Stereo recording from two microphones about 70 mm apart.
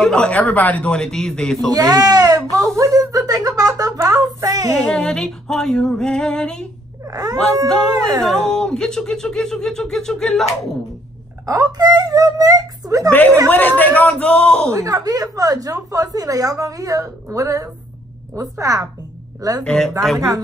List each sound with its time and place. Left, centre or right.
0.0 s a man's voice: centre
1.0 s speech: centre
1.7 s speech: right
4.7 s speech: centre
7.1 s wail: right
7.3 s speech: centre
7.9 s a woman's voice: right
8.2 s speech: centre
11.4 s a woman's voice: right
13.1 s a man's voice: left
14.7 s a woman's voice: right
19.6 s speech: centre